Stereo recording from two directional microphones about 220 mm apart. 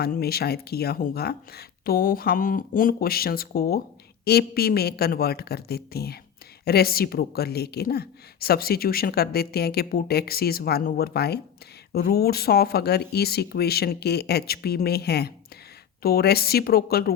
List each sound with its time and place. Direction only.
0.0 s a woman's voice: 45° left (ahead or behind)